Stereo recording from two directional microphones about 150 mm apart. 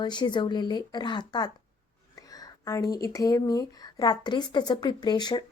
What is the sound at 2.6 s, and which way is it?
Speech, 20° left (ahead or behind).